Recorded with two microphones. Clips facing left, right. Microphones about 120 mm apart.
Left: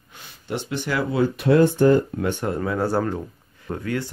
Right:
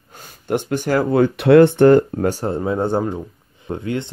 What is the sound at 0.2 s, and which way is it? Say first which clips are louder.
Speech: right 8 dB; 50° right (ahead or behind).